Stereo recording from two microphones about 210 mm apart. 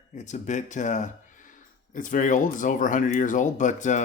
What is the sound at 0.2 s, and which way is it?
Speech, 35° left (ahead or behind).